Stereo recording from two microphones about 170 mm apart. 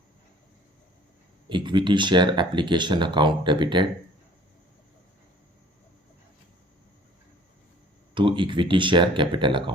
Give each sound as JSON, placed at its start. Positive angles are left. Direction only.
{"t": 1.5, "sound": "speech", "side_deg": -25}
{"t": 8.1, "sound": "speech", "side_deg": -30}